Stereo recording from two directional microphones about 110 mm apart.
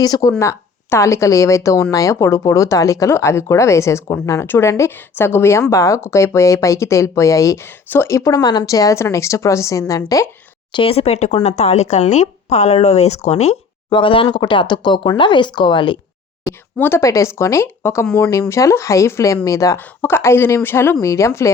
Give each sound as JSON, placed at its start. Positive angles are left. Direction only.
{"t": 0.0, "sound": "speech", "side_deg": 35}
{"t": 10.7, "sound": "speech", "side_deg": 50}
{"t": 13.9, "sound": "speech", "side_deg": 50}
{"t": 16.7, "sound": "speech", "side_deg": 20}